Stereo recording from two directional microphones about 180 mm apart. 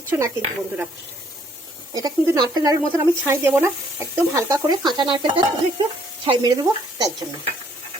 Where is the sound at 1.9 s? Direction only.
20° right (ahead or behind).